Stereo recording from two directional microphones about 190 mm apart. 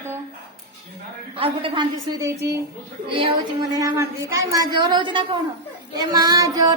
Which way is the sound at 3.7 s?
15° right (ahead or behind).